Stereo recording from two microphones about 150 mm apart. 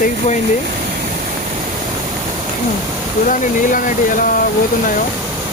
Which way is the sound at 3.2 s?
60° left (ahead or behind).